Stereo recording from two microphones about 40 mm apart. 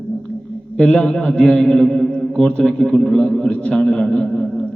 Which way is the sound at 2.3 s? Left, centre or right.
Left.